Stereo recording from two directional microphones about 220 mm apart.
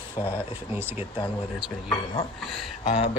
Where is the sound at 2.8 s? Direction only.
30° left (ahead or behind).